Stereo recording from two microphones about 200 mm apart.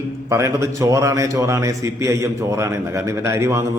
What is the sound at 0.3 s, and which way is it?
A man's voice, 15° right (ahead or behind).